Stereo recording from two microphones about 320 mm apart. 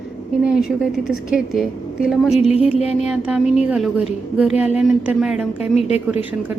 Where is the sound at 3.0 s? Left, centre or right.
Centre.